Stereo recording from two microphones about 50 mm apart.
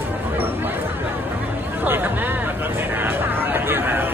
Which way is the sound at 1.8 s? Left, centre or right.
Right.